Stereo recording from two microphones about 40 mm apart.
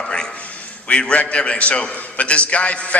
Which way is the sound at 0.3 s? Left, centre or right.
Left.